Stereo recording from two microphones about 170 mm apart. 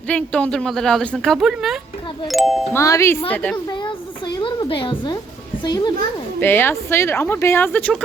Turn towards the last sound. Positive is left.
turn(degrees=10)  # may be behind; listen again after turning